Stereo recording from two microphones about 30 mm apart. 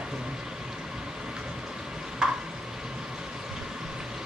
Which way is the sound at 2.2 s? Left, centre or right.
Right.